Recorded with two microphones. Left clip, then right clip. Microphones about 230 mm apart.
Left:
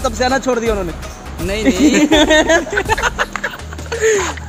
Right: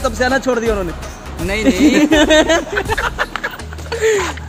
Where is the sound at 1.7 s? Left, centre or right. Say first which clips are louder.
Even; centre.